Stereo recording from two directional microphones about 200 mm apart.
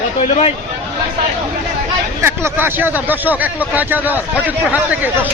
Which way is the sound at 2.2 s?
10° right (ahead or behind).